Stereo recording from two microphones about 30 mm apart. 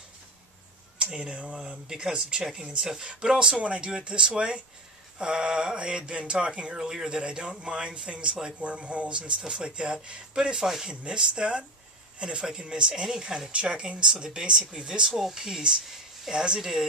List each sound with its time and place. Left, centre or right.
1.1 s speech: right
1.9 s mantra: right
2.8 s speech: centre
3.2 s mantra: right
3.6 s speech: right
5.2 s mantra: right
6.1 s speech: right
6.8 s speech: right
10.6 s speech: centre
10.9 s speech: right
12.4 s mantra: right
13.5 s speech: right; by 15.3 s centre
15.3 s mantra: right